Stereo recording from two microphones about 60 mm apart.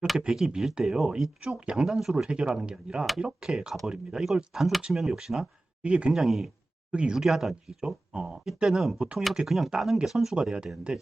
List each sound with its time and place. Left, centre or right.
0.2 s speech: centre
1.5 s speech: centre
1.8 s speech: centre
2.3 s speech: centre
5.8 s speech: centre
6.1 s speech: centre
6.9 s speech: centre
7.2 s speech: centre